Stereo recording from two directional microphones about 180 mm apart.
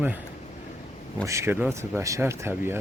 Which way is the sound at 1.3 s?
15° right (ahead or behind).